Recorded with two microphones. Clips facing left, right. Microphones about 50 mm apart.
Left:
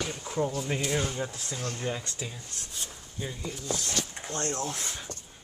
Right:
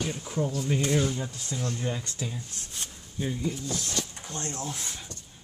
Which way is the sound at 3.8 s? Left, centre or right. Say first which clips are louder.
Even; left.